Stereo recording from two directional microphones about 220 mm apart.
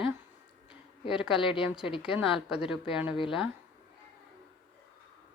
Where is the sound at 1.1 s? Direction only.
5° right (ahead or behind).